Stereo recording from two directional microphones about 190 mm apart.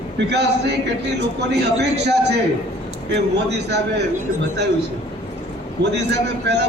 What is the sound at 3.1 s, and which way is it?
Speech, 60° right (ahead or behind).